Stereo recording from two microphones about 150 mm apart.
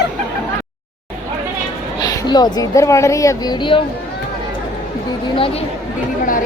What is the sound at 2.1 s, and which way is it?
Speech, 25° left (ahead or behind).